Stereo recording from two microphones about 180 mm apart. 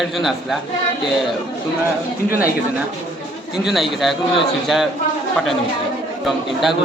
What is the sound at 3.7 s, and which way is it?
Speech, centre (ahead or behind).